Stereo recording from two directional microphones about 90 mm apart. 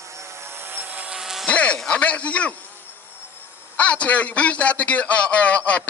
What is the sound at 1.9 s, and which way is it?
Speech, 15° left (ahead or behind).